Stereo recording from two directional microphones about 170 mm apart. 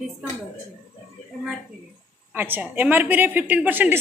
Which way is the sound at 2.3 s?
10° right (ahead or behind).